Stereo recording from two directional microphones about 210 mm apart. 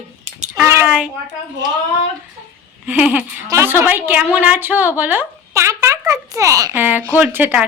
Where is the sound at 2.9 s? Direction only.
10° right (ahead or behind).